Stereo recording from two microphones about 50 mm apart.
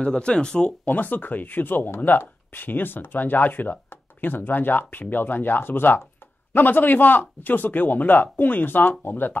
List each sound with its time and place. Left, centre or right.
0.0 s speech: centre
0.8 s speech: left